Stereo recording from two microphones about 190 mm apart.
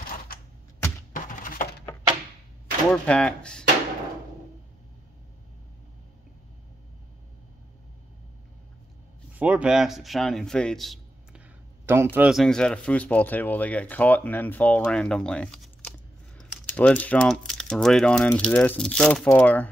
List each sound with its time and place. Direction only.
1.1 s a sound: 45° left (ahead or behind)
2.9 s a man's voice: 5° left (ahead or behind)
9.3 s a man's voice: 5° right (ahead or behind)